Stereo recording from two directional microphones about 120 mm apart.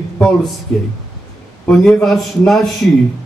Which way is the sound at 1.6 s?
Centre (ahead or behind).